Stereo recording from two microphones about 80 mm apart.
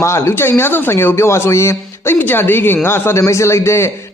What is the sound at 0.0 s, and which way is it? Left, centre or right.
Speech, left.